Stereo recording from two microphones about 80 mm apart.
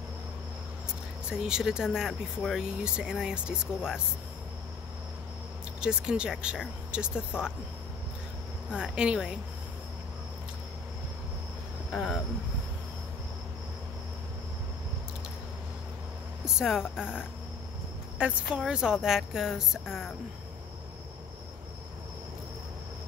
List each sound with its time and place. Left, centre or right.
1.3 s speech: centre
5.8 s speech: centre
8.7 s speech: centre
11.9 s speech: centre
16.4 s speech: centre
18.2 s a woman's voice: centre